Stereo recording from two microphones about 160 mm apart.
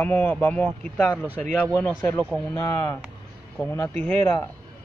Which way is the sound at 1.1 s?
10° right (ahead or behind).